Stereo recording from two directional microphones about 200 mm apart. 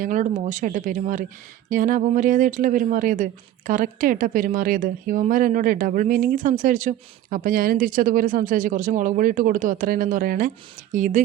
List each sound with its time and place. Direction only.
0.0 s a woman's voice: 40° right (ahead or behind)